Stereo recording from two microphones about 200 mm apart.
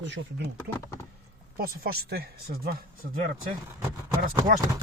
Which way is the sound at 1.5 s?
50° right (ahead or behind).